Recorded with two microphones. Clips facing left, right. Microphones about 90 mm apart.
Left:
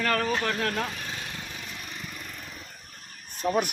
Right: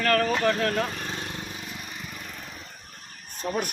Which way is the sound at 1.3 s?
20° right (ahead or behind).